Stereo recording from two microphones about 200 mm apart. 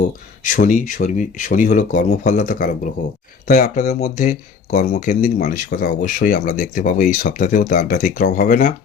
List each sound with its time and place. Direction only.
0.4 s speech: 40° left (ahead or behind)